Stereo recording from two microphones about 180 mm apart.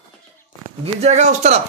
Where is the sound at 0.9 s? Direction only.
40° right (ahead or behind).